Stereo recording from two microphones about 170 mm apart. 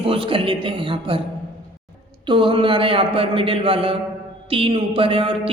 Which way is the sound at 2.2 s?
30° right (ahead or behind).